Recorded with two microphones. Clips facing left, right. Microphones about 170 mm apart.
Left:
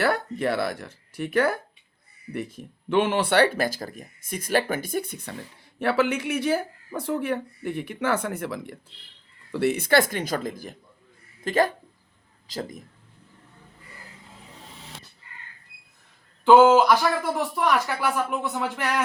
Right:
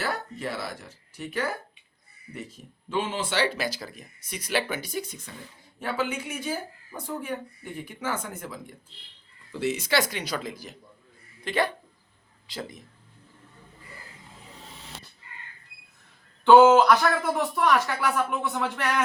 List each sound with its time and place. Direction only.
0.0 s speech: 60° left (ahead or behind)
2.9 s speech: 65° left (ahead or behind)
5.8 s speech: 70° left (ahead or behind)
9.5 s speech: 60° left (ahead or behind); by 12.8 s 45° left (ahead or behind)
16.4 s speech: 10° left (ahead or behind)